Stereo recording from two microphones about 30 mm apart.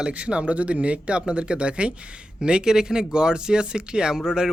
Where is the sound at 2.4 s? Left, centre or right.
Right.